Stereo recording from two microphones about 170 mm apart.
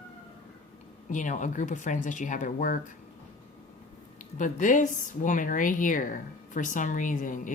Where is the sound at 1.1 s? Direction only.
45° left (ahead or behind).